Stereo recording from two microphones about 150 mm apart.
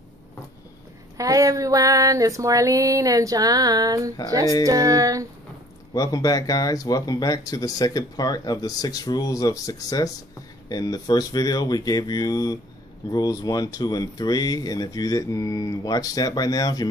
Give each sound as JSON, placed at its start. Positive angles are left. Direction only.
{"t": 1.1, "sound": "female singing", "side_deg": -20}
{"t": 5.9, "sound": "speech", "side_deg": 25}